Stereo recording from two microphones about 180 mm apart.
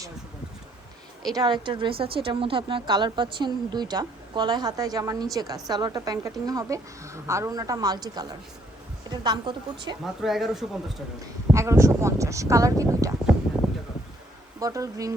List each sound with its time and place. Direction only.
1.3 s a woman's voice: 20° right (ahead or behind)
10.2 s speech: centre (ahead or behind)
11.5 s speech: 15° right (ahead or behind)
14.6 s a woman's voice: 20° right (ahead or behind)